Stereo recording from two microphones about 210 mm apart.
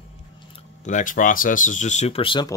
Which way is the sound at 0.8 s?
35° left (ahead or behind).